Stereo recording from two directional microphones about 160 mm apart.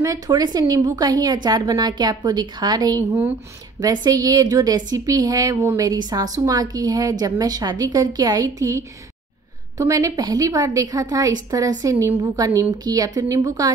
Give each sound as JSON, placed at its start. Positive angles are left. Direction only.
{"t": 0.0, "sound": "a woman's voice", "side_deg": -20}